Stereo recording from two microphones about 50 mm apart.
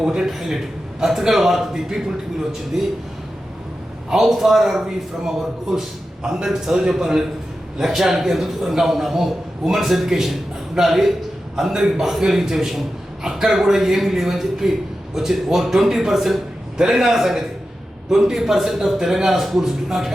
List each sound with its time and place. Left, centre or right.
0.0 s a man's voice: centre
0.3 s a man's voice: centre
4.1 s a man's voice: centre